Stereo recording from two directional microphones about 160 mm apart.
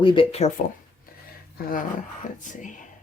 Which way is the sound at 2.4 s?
50° left (ahead or behind).